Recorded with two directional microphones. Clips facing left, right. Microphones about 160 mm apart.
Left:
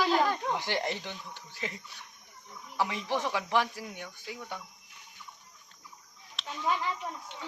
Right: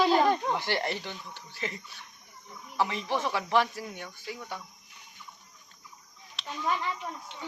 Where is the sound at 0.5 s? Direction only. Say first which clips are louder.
Right 2 dB; 15° left (ahead or behind).